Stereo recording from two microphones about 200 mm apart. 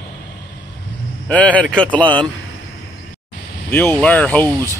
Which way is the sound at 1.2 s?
5° left (ahead or behind).